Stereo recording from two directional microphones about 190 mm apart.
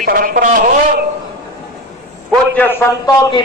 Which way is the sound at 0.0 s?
45° right (ahead or behind).